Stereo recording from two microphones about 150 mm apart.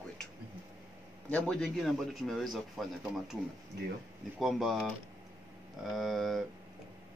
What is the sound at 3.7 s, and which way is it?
Speech, 90° right.